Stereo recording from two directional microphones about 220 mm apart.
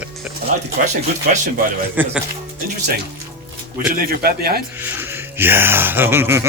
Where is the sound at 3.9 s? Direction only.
40° right (ahead or behind).